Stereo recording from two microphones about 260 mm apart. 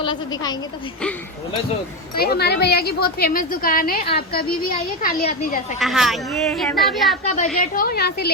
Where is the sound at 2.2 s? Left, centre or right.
Left.